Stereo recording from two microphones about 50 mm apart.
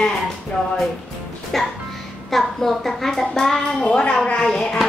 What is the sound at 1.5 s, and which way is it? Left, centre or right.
A child's voice, centre.